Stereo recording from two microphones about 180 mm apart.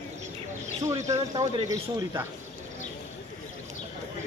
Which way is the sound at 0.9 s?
20° right (ahead or behind).